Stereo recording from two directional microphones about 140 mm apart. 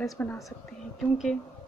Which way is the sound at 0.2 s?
15° left (ahead or behind).